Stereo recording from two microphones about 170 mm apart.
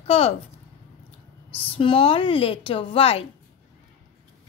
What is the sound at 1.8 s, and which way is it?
A woman's voice, 30° left (ahead or behind).